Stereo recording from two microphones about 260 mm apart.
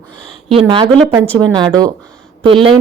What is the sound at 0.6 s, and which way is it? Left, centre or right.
A woman's voice, centre.